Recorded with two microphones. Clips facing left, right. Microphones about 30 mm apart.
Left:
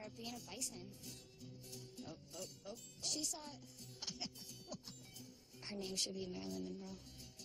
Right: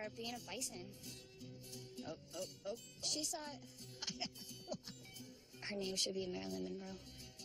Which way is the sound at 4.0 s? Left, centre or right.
Right.